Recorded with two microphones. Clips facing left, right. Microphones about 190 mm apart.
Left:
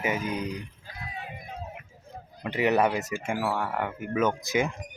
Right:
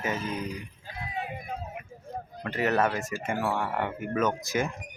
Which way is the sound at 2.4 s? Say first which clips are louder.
Left 2 dB; 15° left (ahead or behind).